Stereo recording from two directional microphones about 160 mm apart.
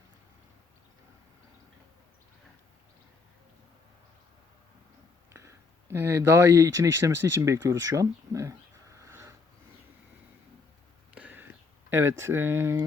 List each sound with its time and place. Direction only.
5.3 s speech: 20° right (ahead or behind)
11.1 s a sound: 10° right (ahead or behind)
11.9 s speech: 15° right (ahead or behind)